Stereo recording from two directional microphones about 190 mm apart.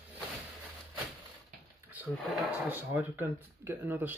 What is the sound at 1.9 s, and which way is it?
Speech, 5° right (ahead or behind).